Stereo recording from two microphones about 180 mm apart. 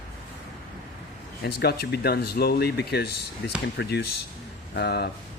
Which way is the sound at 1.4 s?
65° left (ahead or behind).